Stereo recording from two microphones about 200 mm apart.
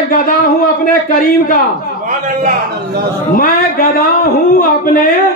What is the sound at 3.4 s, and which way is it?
A man's voice, 45° left (ahead or behind).